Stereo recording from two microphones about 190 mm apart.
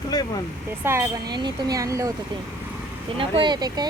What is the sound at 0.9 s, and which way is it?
Speech, 15° right (ahead or behind).